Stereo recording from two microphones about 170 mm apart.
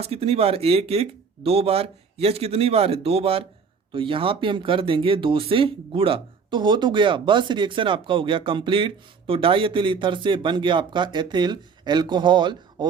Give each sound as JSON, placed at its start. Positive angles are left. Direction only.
{"t": 0.0, "sound": "speech", "side_deg": -35}